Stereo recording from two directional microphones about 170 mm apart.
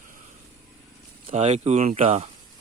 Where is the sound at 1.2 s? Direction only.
40° right (ahead or behind).